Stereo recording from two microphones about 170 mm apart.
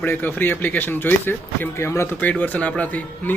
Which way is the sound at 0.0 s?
10° left (ahead or behind).